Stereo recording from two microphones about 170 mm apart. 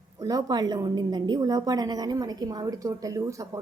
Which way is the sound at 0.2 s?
20° right (ahead or behind).